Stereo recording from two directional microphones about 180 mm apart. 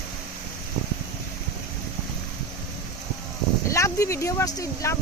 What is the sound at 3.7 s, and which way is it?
Speech, 15° left (ahead or behind).